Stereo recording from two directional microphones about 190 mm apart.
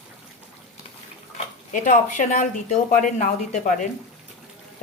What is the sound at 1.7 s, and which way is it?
A woman's voice, 40° left (ahead or behind).